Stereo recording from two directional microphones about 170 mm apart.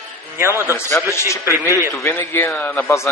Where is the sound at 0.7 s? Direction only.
20° left (ahead or behind).